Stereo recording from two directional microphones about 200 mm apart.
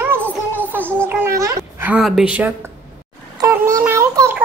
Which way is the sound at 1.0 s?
15° right (ahead or behind).